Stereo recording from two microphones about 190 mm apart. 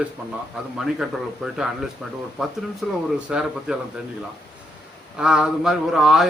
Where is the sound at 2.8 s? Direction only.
Centre (ahead or behind).